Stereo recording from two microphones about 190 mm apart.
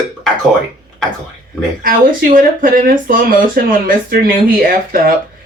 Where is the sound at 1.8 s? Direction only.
45° right (ahead or behind).